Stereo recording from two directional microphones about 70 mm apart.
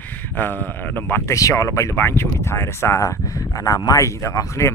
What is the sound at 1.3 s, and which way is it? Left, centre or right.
Speech, left.